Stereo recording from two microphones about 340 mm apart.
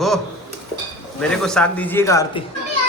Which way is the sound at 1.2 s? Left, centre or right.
Centre.